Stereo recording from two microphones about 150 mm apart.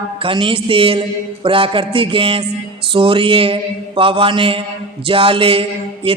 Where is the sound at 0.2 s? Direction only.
35° right (ahead or behind).